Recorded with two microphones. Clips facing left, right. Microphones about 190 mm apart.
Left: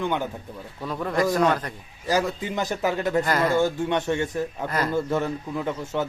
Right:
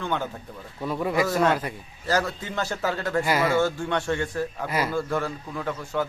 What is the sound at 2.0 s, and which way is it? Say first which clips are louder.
A man's voice: left 2 dB; 15° left (ahead or behind).